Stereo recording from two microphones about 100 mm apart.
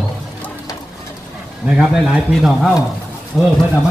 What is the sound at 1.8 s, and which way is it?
A man's voice, 5° right (ahead or behind).